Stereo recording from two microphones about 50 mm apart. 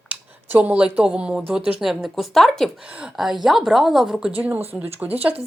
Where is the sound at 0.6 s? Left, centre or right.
Right.